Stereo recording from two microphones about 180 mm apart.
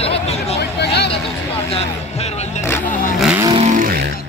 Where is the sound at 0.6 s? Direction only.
65° left (ahead or behind).